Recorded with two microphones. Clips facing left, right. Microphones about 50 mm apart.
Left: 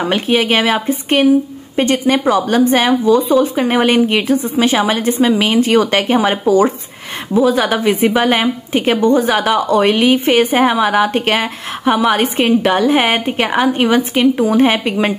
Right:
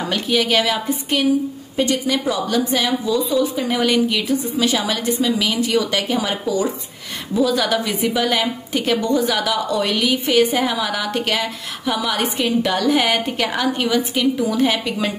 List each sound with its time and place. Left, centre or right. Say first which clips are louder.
0.0 s a woman's voice: left 5 dB; left
7.3 s a woman's voice: left 5 dB; left